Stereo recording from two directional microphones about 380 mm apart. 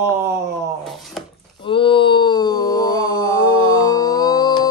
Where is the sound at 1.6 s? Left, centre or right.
Centre.